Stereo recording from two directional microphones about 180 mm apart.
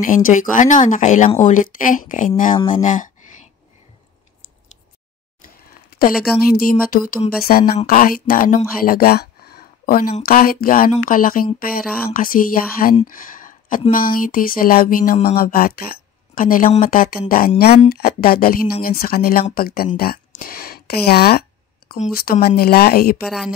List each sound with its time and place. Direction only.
0.0 s speech: 45° left (ahead or behind)
5.4 s a sound: 55° left (ahead or behind)
6.3 s speech: 55° left (ahead or behind)
8.8 s a sound: 55° left (ahead or behind)
10.2 s speech: 55° left (ahead or behind)
23.2 s speech: centre (ahead or behind)